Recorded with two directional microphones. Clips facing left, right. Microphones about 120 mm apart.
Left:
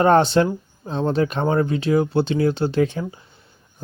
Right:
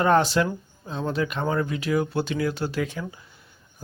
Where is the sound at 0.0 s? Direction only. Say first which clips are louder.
Left 5 dB; 35° left (ahead or behind).